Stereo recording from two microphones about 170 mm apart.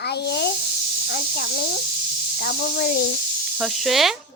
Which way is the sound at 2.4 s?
60° left (ahead or behind).